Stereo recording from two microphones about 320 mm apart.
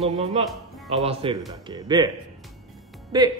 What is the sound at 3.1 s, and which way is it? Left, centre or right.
Speech, centre.